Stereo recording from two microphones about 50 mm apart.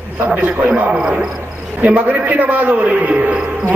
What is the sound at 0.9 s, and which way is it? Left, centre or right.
Speech, centre.